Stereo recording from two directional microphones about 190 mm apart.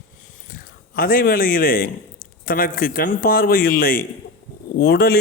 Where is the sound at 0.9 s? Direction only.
50° left (ahead or behind).